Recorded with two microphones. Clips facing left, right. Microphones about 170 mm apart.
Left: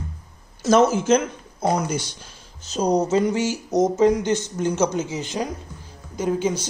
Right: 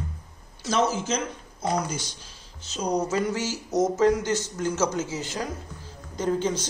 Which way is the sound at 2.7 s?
35° left (ahead or behind).